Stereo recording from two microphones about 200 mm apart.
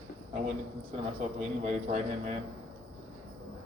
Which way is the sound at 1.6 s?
35° right (ahead or behind).